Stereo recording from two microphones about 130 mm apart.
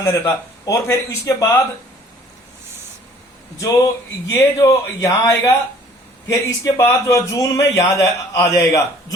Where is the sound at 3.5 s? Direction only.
25° left (ahead or behind).